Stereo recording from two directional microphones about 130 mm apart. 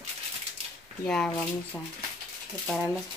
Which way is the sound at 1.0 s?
10° left (ahead or behind).